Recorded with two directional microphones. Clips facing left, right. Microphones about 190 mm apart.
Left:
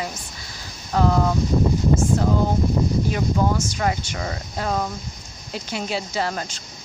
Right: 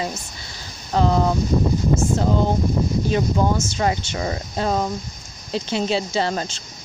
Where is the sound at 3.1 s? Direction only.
25° right (ahead or behind).